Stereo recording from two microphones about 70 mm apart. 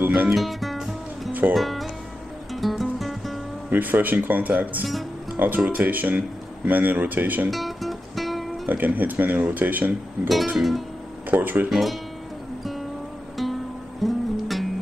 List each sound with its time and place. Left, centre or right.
0.0 s music: right
0.3 s music: centre
1.5 s speech: centre
2.5 s music: centre
3.7 s speech: right
7.5 s music: centre
8.6 s speech: right
10.2 s music: centre
11.2 s speech: right
11.7 s music: centre
14.0 s music: centre